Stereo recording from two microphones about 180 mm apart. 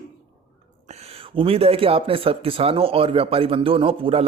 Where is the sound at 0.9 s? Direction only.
35° right (ahead or behind).